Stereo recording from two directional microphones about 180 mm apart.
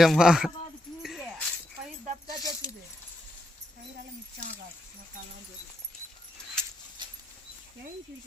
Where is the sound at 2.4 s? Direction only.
20° left (ahead or behind).